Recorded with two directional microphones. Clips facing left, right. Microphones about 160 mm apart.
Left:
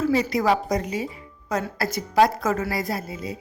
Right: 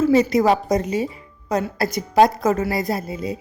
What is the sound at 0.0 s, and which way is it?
A woman's voice, 20° right (ahead or behind).